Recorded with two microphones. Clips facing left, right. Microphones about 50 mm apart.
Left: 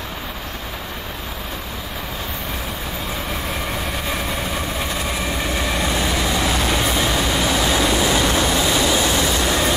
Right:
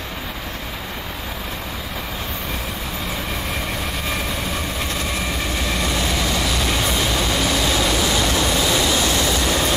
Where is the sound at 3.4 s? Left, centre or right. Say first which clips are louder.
Left 1 dB; centre; by 6.7 s left.